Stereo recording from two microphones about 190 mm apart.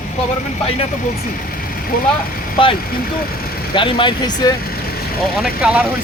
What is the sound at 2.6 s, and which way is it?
Speech, 25° left (ahead or behind).